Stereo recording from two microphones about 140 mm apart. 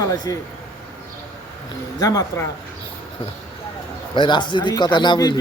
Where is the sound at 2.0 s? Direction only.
25° left (ahead or behind).